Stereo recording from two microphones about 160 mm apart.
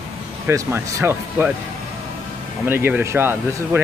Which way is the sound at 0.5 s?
15° right (ahead or behind).